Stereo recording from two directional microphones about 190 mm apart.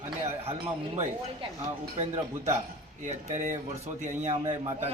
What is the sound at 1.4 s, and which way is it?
Speech, 25° right (ahead or behind).